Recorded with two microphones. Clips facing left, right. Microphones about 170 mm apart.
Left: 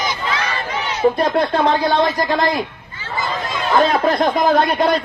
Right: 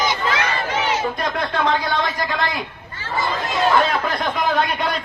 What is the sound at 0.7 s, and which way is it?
Crowd, 90° right.